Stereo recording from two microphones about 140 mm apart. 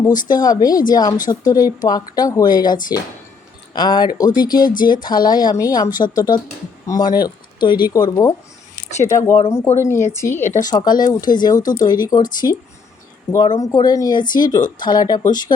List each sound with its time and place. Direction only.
0.3 s speech: 30° left (ahead or behind)
10.4 s speech: 60° left (ahead or behind)
10.7 s speech: 30° left (ahead or behind)